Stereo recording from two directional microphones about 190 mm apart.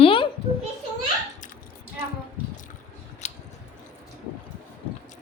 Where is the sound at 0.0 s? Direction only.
25° left (ahead or behind).